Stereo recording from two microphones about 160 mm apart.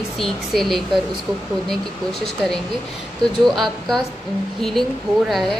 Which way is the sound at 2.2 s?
Centre (ahead or behind).